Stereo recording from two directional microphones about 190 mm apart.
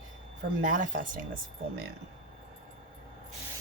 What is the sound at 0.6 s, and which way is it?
Speech, 45° right (ahead or behind).